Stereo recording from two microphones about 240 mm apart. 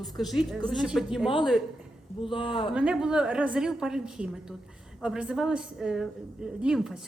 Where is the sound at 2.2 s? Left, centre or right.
Left.